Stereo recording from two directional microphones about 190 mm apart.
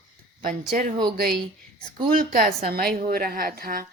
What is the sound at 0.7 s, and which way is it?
A woman's voice, 50° right (ahead or behind).